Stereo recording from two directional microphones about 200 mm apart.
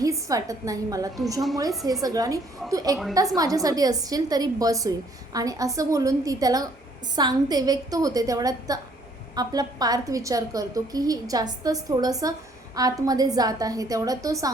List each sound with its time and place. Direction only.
0.0 s a woman's voice: 15° right (ahead or behind)